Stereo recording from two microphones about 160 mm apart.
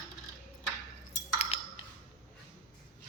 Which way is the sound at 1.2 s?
45° left (ahead or behind).